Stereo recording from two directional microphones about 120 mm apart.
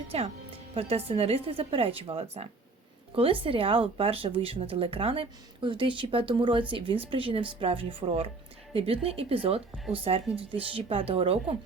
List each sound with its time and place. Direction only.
0.1 s speech: 60° right (ahead or behind)